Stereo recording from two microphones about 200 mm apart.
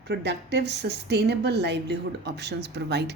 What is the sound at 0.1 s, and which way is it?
A woman's voice, 60° right (ahead or behind).